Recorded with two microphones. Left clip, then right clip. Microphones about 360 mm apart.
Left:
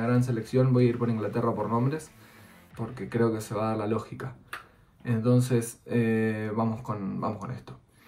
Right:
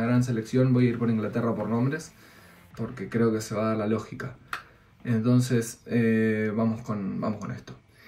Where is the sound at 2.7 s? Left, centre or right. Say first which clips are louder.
Even; centre.